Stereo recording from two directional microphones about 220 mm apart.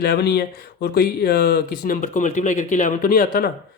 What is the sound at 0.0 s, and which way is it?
Speech, 50° left (ahead or behind).